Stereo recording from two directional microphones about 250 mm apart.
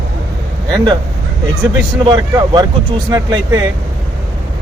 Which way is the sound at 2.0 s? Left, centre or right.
Centre.